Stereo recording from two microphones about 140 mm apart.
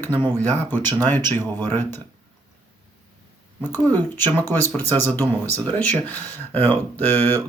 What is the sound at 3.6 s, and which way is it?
Speech, 15° left (ahead or behind).